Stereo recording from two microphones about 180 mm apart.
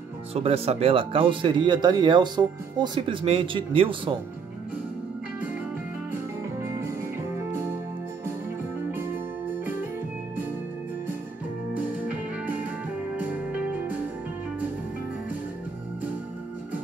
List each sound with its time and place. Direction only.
0.3 s speech: 35° right (ahead or behind)
7.5 s music: 15° right (ahead or behind)
11.9 s music: 10° right (ahead or behind)